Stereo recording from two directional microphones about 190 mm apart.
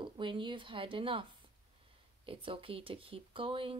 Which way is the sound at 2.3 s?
30° right (ahead or behind).